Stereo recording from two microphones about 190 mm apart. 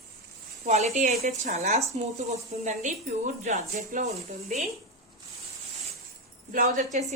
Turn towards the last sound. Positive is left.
turn(degrees=-40)  # may be behind; listen again after turning